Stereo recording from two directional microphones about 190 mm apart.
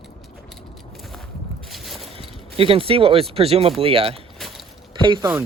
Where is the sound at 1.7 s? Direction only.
Centre (ahead or behind).